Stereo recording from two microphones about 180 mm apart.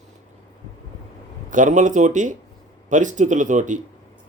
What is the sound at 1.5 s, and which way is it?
Speech, 45° right (ahead or behind).